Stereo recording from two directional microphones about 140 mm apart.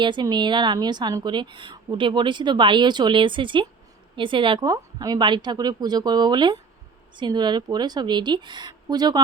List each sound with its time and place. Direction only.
0.0 s a woman's voice: 35° right (ahead or behind)